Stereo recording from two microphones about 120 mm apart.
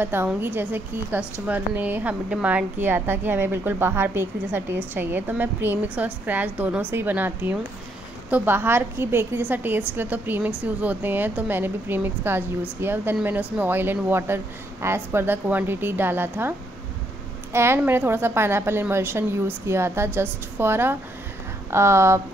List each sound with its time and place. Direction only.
0.0 s a woman's voice: 20° right (ahead or behind)